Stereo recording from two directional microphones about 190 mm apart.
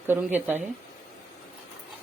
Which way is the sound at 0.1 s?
10° right (ahead or behind).